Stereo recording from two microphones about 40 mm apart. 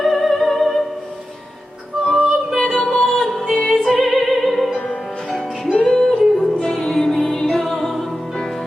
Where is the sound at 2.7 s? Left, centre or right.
Left.